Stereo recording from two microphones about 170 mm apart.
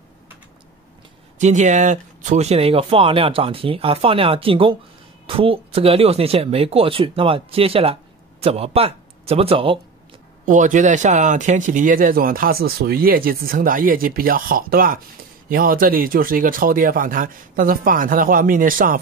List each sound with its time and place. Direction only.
1.4 s speech: 45° right (ahead or behind)
10.4 s speech: 50° right (ahead or behind)